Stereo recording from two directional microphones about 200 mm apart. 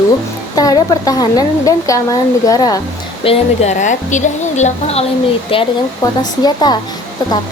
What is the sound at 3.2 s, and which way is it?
A woman's voice, 30° left (ahead or behind).